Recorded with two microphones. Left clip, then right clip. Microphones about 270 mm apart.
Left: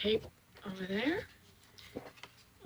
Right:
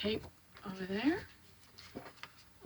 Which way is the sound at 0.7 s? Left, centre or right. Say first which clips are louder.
Even; right.